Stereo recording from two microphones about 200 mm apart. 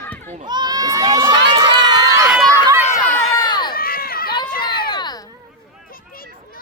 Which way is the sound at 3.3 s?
20° left (ahead or behind).